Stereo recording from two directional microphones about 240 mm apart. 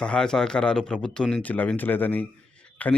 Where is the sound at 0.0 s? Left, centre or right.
Centre.